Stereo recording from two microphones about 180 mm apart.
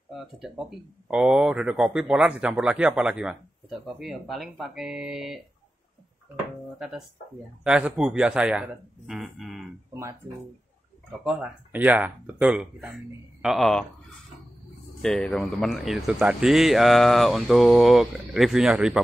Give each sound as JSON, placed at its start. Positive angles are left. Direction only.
{"t": 0.4, "sound": "speech", "side_deg": -5}
{"t": 7.6, "sound": "speech", "side_deg": -5}
{"t": 11.2, "sound": "speech", "side_deg": -5}
{"t": 15.0, "sound": "speech", "side_deg": 5}